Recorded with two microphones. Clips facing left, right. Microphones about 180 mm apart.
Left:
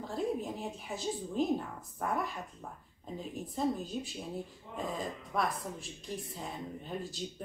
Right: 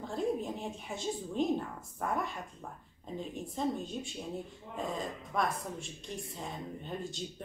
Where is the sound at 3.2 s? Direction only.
5° left (ahead or behind).